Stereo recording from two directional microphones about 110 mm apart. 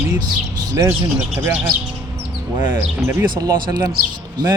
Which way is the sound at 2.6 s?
20° right (ahead or behind).